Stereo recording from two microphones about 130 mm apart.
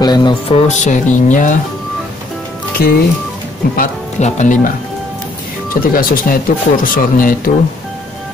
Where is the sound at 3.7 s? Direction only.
75° left (ahead or behind).